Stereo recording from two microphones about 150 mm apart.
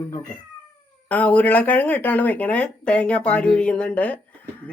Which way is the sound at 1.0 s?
10° left (ahead or behind).